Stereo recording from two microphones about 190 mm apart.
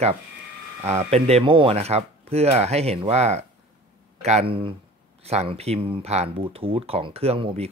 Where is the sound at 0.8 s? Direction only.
35° right (ahead or behind).